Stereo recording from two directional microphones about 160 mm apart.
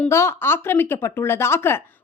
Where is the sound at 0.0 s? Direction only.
15° left (ahead or behind).